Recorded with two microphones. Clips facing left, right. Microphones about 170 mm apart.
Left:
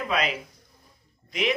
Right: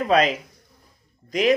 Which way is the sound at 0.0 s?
40° right (ahead or behind).